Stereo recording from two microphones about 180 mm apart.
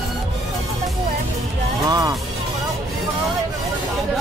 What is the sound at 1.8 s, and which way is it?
Music, 20° right (ahead or behind).